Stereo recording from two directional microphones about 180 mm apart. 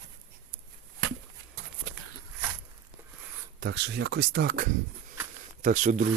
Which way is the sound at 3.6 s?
70° right (ahead or behind).